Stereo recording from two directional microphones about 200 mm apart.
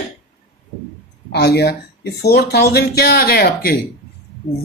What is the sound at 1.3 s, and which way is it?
Speech, 55° left (ahead or behind).